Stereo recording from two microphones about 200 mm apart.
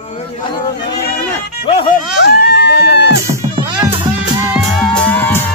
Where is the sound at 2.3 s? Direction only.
60° left (ahead or behind).